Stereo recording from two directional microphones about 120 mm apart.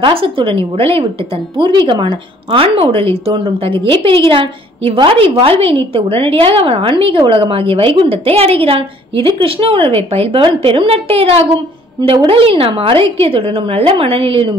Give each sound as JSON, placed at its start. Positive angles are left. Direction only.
{"t": 0.0, "sound": "a woman's voice", "side_deg": -50}
{"t": 1.7, "sound": "a woman's voice", "side_deg": -40}